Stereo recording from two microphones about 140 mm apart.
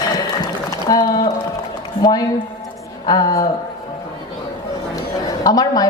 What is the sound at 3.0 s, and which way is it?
Mantra, 25° left (ahead or behind).